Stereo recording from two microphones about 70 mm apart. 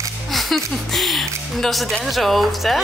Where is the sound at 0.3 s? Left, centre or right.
Centre.